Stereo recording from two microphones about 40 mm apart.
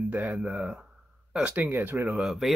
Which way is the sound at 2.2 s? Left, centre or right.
Centre.